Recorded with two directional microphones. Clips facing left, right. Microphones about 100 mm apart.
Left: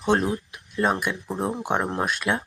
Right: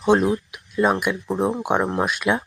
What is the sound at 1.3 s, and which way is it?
Speech, 25° right (ahead or behind).